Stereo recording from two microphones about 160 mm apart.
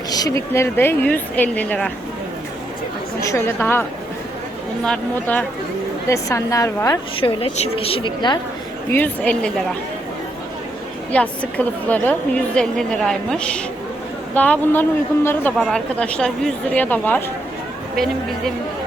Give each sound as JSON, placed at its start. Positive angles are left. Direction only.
{"t": 0.1, "sound": "speech", "side_deg": 25}
{"t": 3.2, "sound": "speech", "side_deg": 15}
{"t": 6.1, "sound": "a woman's voice", "side_deg": 20}
{"t": 7.2, "sound": "a woman's voice", "side_deg": 35}
{"t": 8.9, "sound": "speech", "side_deg": 10}
{"t": 11.1, "sound": "a woman's voice", "side_deg": 10}